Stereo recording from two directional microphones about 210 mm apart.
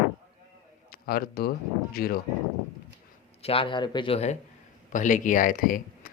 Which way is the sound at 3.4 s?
25° left (ahead or behind).